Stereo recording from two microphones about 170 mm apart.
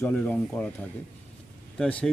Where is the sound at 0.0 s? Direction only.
10° left (ahead or behind).